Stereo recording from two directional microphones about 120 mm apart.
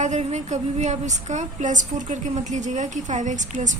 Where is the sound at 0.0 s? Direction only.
70° right (ahead or behind).